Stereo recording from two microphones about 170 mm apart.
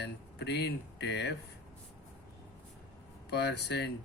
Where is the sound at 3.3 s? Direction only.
75° left (ahead or behind).